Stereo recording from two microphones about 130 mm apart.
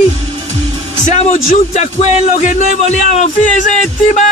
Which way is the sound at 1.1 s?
70° left (ahead or behind).